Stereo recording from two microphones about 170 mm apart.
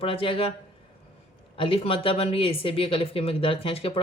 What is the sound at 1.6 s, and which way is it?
Speech, 35° left (ahead or behind).